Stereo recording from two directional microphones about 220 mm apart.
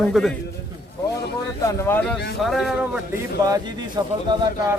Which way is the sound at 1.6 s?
10° left (ahead or behind).